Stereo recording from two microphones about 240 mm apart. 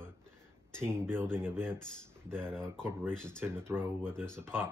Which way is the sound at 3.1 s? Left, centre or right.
Centre.